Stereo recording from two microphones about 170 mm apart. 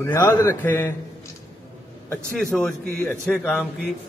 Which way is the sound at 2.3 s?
5° left (ahead or behind).